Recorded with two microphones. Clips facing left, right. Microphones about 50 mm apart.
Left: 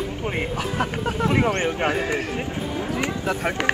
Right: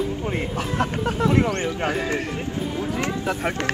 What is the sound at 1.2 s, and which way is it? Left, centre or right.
Speech, centre.